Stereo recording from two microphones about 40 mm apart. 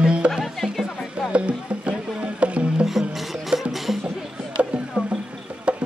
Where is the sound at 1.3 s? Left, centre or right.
Right.